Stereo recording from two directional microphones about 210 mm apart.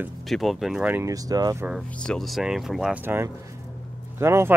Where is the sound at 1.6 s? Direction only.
Centre (ahead or behind).